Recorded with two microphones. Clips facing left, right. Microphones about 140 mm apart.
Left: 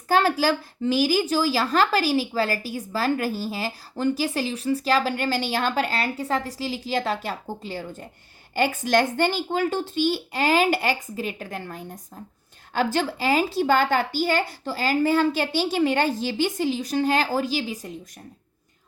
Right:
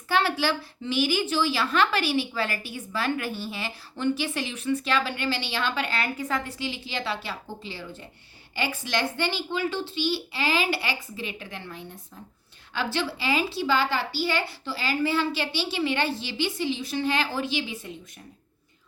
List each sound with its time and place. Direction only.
0.1 s a child's voice: 40° left (ahead or behind)